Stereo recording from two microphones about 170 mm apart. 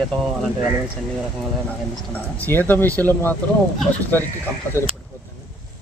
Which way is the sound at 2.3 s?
10° left (ahead or behind).